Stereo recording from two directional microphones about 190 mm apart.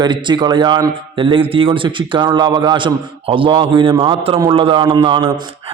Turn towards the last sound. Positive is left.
turn(degrees=-25)  # may be behind; listen again after turning